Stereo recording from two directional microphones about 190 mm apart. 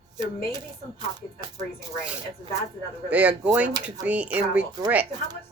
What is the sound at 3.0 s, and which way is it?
Speech, 5° right (ahead or behind).